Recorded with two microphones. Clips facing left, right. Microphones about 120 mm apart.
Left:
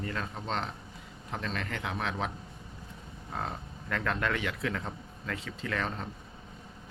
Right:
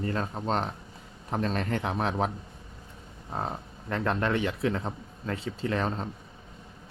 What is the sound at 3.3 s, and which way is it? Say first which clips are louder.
Speech: right 4 dB; 30° right (ahead or behind).